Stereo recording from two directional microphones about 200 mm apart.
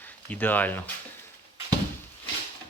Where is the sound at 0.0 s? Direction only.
10° left (ahead or behind).